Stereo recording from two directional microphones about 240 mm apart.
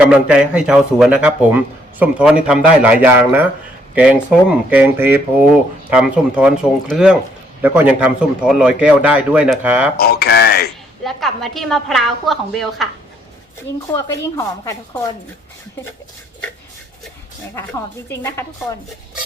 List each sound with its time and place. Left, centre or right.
0.1 s a man's voice: centre
10.0 s a sound: left
11.0 s a man's voice: centre
13.9 s speech: centre
18.1 s speech: centre